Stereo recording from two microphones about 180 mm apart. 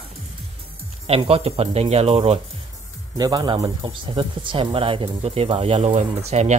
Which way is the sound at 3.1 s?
20° right (ahead or behind).